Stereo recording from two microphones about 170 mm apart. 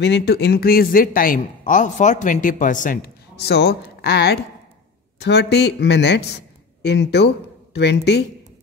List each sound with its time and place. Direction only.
0.0 s a man's voice: 80° left